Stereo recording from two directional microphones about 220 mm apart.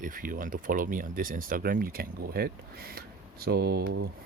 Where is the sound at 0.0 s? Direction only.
40° right (ahead or behind).